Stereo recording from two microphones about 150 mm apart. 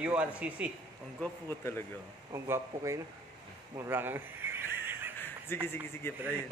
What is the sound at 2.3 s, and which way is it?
Speech, 20° right (ahead or behind).